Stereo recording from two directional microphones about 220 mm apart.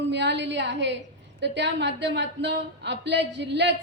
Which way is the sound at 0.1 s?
50° right (ahead or behind).